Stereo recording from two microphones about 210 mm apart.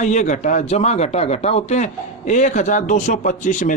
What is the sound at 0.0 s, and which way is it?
Speech, 35° left (ahead or behind).